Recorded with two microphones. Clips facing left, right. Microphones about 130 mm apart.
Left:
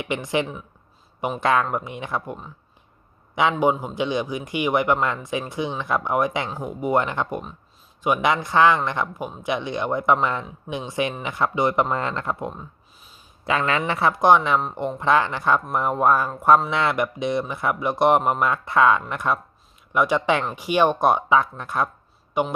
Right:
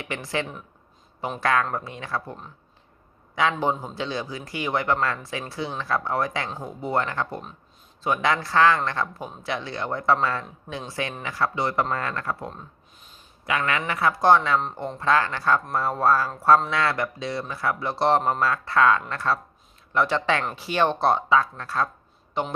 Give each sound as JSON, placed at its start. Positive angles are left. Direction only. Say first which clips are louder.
{"t": 0.0, "sound": "speech", "louder": "left 5 dB", "side_deg": 20}
{"t": 3.5, "sound": "speech", "louder": "left 5 dB", "side_deg": 10}